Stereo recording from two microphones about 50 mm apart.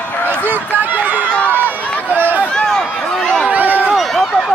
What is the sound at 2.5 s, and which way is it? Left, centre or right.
Run, centre.